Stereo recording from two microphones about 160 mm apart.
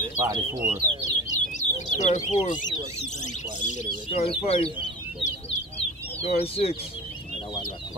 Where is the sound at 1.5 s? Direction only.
50° left (ahead or behind).